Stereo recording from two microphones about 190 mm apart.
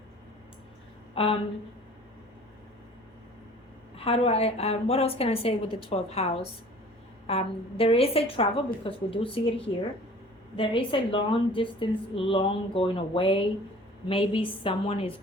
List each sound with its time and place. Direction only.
1.1 s speech: 30° left (ahead or behind)
3.9 s a woman's voice: 30° left (ahead or behind)
10.6 s a woman's voice: 25° left (ahead or behind)